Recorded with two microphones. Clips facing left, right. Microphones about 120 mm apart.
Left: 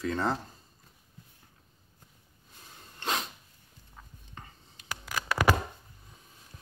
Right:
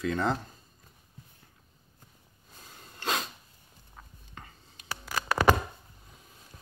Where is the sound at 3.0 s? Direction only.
25° left (ahead or behind).